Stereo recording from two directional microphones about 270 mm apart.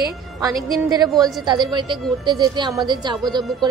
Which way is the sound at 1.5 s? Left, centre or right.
Centre.